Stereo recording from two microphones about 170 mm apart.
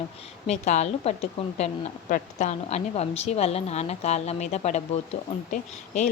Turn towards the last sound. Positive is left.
turn(degrees=45)  # may be behind; listen again after turning